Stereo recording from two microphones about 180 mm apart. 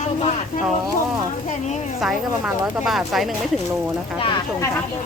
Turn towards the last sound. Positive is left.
turn(degrees=0)  # may be behind; listen again after turning